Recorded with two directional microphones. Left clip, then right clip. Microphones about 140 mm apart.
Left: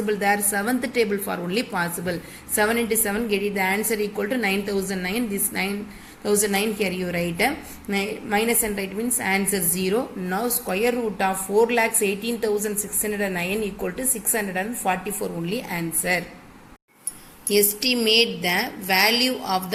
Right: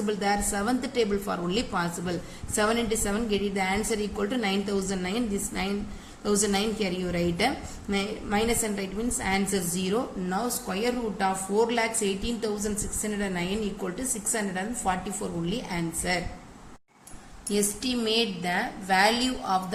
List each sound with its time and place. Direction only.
0.1 s a woman's voice: 20° left (ahead or behind)
17.5 s a woman's voice: 15° left (ahead or behind)